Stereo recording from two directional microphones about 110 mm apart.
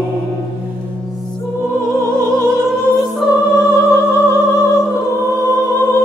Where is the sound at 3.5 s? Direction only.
25° left (ahead or behind).